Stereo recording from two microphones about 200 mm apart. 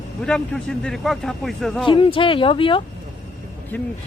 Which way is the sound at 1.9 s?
25° left (ahead or behind).